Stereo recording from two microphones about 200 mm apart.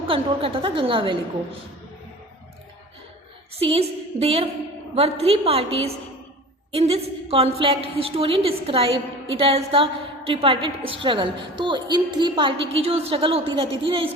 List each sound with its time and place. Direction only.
0.1 s a woman's voice: 25° right (ahead or behind)
3.6 s a woman's voice: 30° right (ahead or behind)